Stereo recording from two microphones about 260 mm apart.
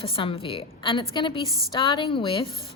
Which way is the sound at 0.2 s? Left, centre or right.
Centre.